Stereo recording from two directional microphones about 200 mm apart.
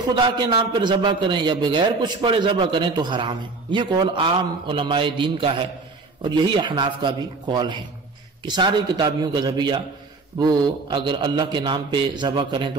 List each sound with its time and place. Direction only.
0.0 s a man's voice: 20° right (ahead or behind)